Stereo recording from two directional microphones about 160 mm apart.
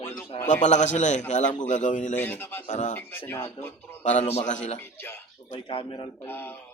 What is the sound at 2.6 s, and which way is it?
Speech, 50° left (ahead or behind).